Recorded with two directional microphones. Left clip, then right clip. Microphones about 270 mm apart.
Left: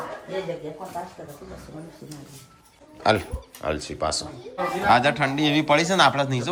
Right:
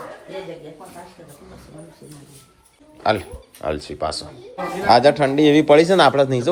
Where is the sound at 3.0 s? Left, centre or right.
Centre.